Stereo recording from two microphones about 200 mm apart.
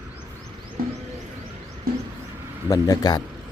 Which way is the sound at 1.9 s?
45° right (ahead or behind).